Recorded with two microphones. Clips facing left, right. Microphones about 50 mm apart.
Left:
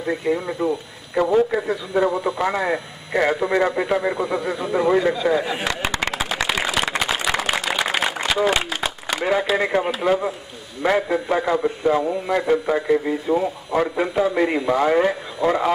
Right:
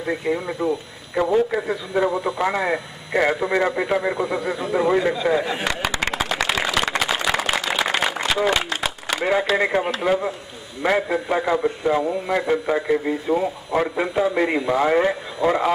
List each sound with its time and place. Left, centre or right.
0.1 s a man's voice: centre
6.1 s a sound: centre
8.3 s a man's voice: centre